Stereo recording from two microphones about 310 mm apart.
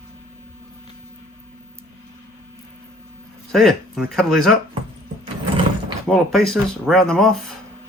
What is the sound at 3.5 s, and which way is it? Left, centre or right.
Speech, centre.